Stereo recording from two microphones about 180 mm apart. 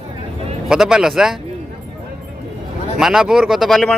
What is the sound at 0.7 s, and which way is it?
Speech, 5° right (ahead or behind).